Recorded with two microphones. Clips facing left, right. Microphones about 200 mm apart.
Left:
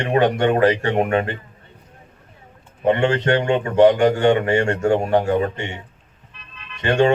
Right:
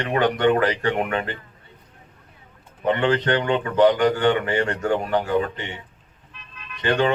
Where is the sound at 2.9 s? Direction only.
25° left (ahead or behind).